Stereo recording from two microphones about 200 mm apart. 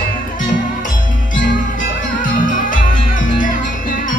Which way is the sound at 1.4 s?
40° left (ahead or behind).